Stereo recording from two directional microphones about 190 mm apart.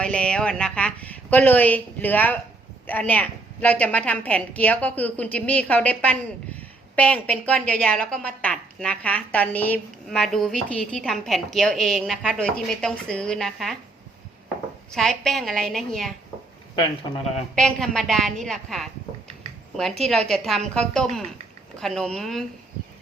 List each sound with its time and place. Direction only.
0.0 s a woman's voice: 5° left (ahead or behind)
14.9 s a woman's voice: centre (ahead or behind)
16.7 s speech: 30° left (ahead or behind)
17.5 s a woman's voice: centre (ahead or behind)
20.1 s a woman's voice: centre (ahead or behind)